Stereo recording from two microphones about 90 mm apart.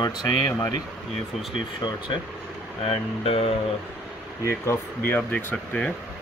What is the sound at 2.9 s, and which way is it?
Speech, 90° left.